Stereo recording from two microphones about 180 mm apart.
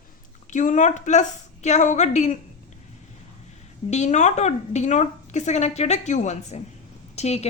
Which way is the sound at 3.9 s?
40° left (ahead or behind).